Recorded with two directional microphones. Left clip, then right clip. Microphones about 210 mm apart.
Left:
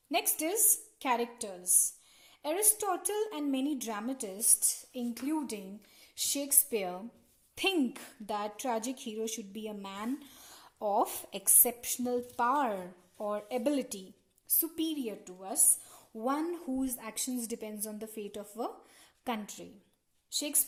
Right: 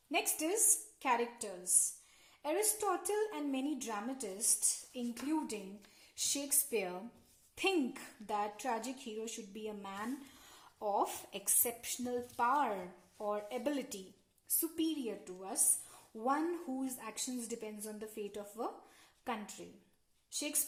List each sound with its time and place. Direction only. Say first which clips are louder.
0.1 s a woman's voice: left 3 dB; 35° left (ahead or behind)
6.1 s a woman's voice: left 4 dB; 35° left (ahead or behind); by 14.0 s 50° left (ahead or behind)
14.6 s a woman's voice: left 2 dB; 40° left (ahead or behind)